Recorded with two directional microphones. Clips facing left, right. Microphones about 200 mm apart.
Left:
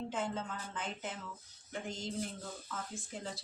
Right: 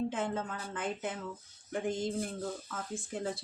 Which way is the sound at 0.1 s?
55° right (ahead or behind).